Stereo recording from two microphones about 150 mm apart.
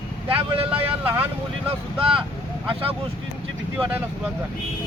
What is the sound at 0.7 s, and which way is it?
Speech, 15° right (ahead or behind).